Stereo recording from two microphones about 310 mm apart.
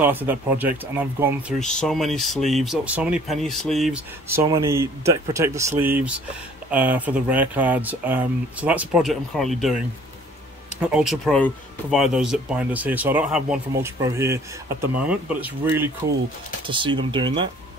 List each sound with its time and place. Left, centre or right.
0.0 s speech: centre
10.8 s speech: centre